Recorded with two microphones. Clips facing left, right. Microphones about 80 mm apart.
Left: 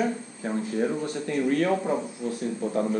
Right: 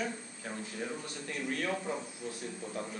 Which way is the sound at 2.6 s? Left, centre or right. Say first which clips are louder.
Left 15 dB; left.